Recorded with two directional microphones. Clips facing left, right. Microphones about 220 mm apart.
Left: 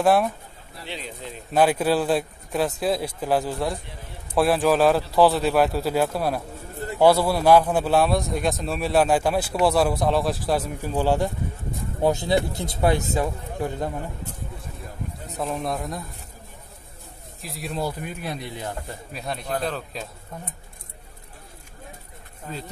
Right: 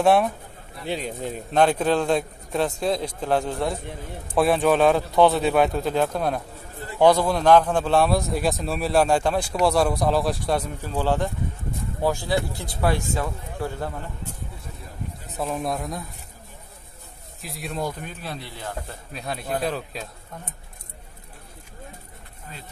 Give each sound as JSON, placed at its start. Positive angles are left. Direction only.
{"t": 0.0, "sound": "a man's voice", "side_deg": 0}
{"t": 0.8, "sound": "speech", "side_deg": -45}
{"t": 1.5, "sound": "a man's voice", "side_deg": 5}
{"t": 10.8, "sound": "a man's voice", "side_deg": 15}
{"t": 15.2, "sound": "a man's voice", "side_deg": 0}
{"t": 17.4, "sound": "a man's voice", "side_deg": 0}
{"t": 19.1, "sound": "a man's voice", "side_deg": -5}